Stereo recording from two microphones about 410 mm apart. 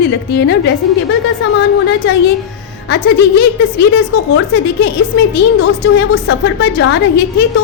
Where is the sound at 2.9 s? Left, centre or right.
Left.